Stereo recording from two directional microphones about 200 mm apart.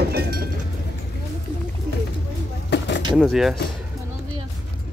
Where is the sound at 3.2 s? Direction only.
Centre (ahead or behind).